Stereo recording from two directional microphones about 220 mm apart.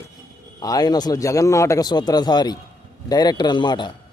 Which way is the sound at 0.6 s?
15° left (ahead or behind).